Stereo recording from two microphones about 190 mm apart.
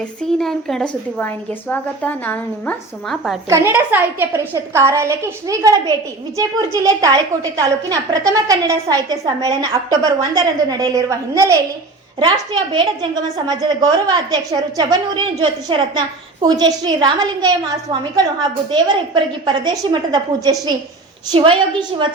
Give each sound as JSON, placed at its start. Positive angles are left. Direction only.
{"t": 0.2, "sound": "a woman's voice", "side_deg": 0}
{"t": 3.5, "sound": "a woman's voice", "side_deg": -10}
{"t": 12.7, "sound": "a woman's voice", "side_deg": -25}